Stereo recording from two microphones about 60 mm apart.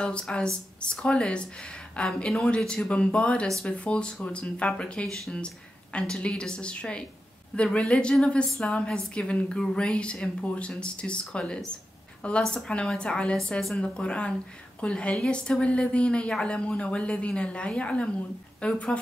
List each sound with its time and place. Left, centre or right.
0.0 s a woman's voice: centre
5.0 s speech: centre
5.9 s a woman's voice: centre
13.6 s a woman's voice: centre
13.9 s a woman's voice: centre